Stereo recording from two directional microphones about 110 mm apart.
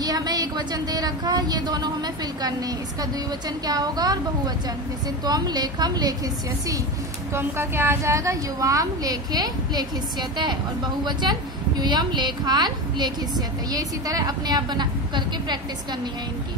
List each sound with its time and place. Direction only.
0.0 s a woman's voice: 35° right (ahead or behind)
5.2 s a woman's voice: 40° right (ahead or behind)
7.3 s a woman's voice: 20° right (ahead or behind); by 15.6 s 40° right (ahead or behind)